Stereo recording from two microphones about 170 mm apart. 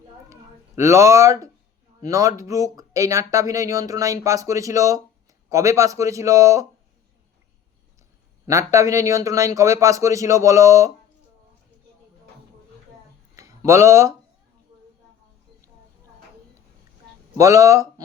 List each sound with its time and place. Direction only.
0.8 s a man's voice: 15° right (ahead or behind)
8.4 s speech: 20° right (ahead or behind)
13.3 s a sound: 15° right (ahead or behind)
17.3 s speech: 20° right (ahead or behind)